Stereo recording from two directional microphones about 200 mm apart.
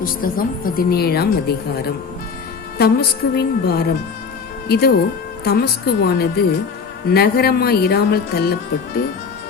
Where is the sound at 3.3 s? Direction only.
50° left (ahead or behind).